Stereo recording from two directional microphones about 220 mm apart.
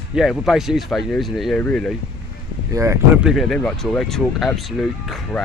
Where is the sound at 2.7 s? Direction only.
10° right (ahead or behind).